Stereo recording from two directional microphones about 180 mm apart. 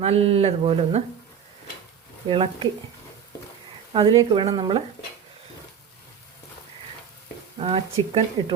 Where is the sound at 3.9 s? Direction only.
30° right (ahead or behind).